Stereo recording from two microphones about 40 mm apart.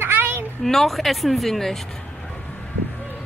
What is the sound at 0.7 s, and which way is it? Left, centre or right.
Speech, centre.